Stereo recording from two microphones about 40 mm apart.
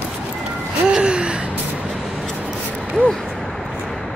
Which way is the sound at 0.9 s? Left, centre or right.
Right.